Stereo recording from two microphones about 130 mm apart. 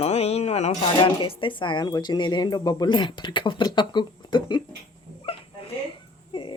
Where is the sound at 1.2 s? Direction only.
40° left (ahead or behind).